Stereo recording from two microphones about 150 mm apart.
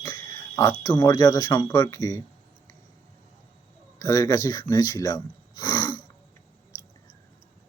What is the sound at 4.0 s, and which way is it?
Speech, 20° left (ahead or behind).